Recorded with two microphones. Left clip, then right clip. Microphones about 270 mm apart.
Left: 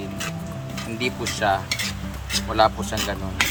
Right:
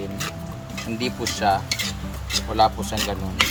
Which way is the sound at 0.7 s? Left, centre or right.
Centre.